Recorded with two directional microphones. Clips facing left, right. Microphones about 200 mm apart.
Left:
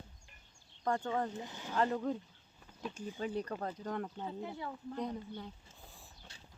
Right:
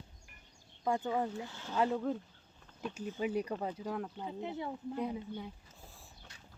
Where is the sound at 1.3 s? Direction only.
20° left (ahead or behind).